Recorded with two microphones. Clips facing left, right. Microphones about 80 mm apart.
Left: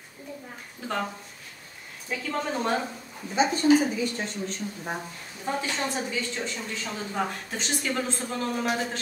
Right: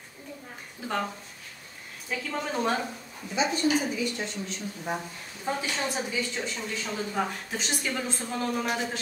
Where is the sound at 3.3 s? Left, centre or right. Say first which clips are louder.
Left 5 dB; left.